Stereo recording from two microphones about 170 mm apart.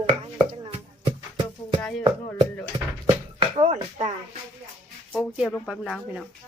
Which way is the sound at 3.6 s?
45° right (ahead or behind).